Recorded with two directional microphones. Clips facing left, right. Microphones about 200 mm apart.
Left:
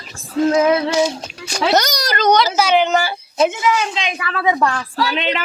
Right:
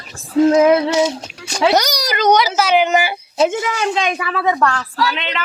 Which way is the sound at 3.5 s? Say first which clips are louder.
Even; 50° right (ahead or behind).